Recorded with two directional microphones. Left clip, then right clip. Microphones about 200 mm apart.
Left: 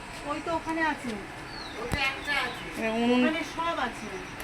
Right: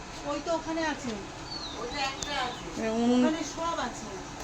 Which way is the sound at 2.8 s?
20° right (ahead or behind).